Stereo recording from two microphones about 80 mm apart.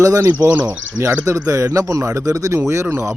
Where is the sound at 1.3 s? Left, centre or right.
Right.